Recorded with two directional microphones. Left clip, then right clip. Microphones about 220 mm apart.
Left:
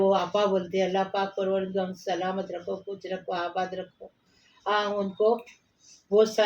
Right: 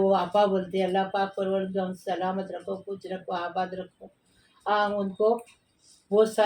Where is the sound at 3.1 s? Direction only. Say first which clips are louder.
Left 1 dB; centre (ahead or behind).